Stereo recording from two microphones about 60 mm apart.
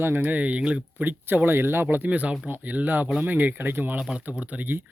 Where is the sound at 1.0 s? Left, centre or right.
Right.